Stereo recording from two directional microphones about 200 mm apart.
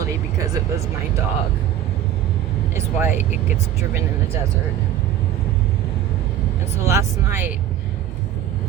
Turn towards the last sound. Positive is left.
turn(degrees=-10)  # may be behind; listen again after turning